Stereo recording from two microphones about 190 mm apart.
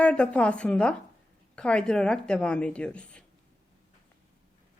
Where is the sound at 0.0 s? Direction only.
5° left (ahead or behind).